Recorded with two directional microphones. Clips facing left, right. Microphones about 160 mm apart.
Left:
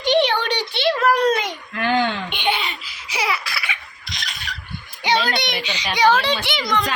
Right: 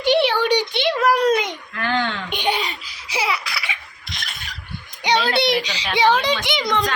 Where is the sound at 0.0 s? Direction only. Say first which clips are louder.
Right 1 dB; 10° right (ahead or behind).